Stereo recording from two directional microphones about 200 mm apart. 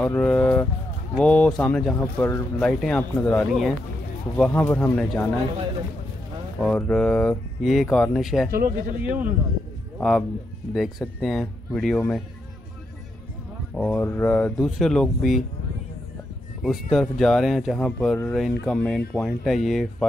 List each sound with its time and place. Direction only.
0.0 s speech: 5° left (ahead or behind)
6.6 s speech: 5° left (ahead or behind)
8.5 s speech: 45° right (ahead or behind)
9.9 s speech: centre (ahead or behind)
13.7 s speech: 10° left (ahead or behind)
16.6 s speech: centre (ahead or behind)